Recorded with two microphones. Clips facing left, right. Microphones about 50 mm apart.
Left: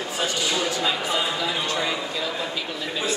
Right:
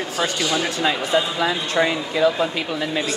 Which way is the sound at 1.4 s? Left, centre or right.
Right.